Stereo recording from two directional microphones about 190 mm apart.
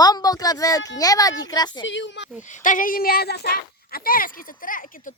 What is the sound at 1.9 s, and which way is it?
Speech, 75° left (ahead or behind).